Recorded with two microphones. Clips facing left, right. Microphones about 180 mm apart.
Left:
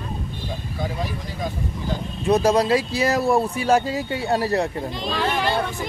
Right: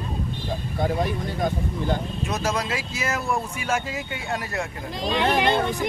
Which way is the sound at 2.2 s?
30° left (ahead or behind).